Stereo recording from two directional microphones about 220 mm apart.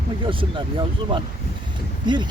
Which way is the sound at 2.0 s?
20° right (ahead or behind).